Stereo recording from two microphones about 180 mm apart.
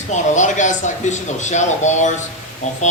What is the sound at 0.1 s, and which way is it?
Speech, 45° left (ahead or behind).